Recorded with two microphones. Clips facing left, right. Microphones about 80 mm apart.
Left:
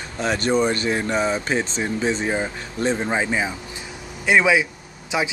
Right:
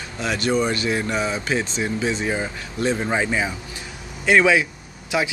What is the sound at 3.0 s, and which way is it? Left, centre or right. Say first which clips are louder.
Speech: even; centre.